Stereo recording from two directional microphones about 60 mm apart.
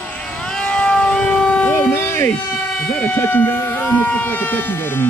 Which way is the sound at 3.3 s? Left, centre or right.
Left.